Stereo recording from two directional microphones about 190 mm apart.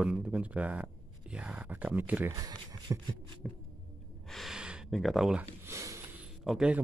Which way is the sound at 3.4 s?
Centre (ahead or behind).